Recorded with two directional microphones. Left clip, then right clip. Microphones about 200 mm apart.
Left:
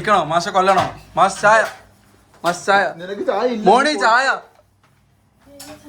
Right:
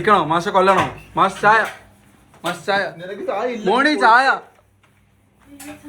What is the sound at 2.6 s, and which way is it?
Speech, 20° left (ahead or behind).